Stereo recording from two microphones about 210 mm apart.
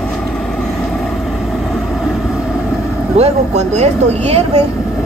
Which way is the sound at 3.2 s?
30° right (ahead or behind).